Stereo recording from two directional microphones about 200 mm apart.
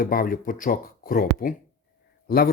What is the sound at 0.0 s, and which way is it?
Speech, 45° left (ahead or behind).